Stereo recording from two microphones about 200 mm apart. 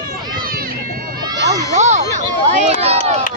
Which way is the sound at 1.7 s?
35° right (ahead or behind).